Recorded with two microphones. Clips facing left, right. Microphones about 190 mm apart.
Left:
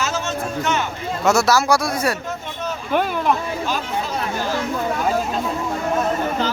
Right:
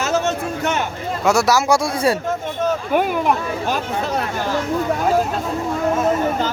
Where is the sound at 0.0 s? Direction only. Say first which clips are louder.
Right 4 dB; 60° right (ahead or behind).